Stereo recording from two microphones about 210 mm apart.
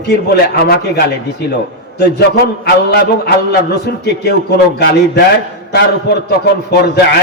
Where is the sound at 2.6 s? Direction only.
50° left (ahead or behind).